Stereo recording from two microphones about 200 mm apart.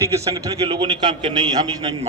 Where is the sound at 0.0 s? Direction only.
15° right (ahead or behind).